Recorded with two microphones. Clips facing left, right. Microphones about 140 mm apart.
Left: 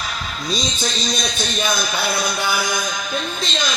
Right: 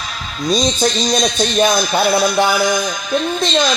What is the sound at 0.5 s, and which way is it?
Speech, 50° right (ahead or behind).